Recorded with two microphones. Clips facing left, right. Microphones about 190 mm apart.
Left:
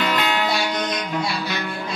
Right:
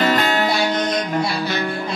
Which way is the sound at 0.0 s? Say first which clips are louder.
Right 4 dB; 45° right (ahead or behind).